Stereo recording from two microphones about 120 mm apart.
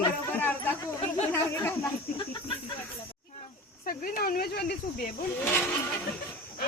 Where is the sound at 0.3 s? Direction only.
15° left (ahead or behind).